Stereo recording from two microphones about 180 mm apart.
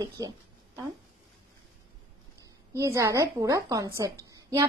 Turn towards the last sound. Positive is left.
turn(degrees=-20)  # may be behind; listen again after turning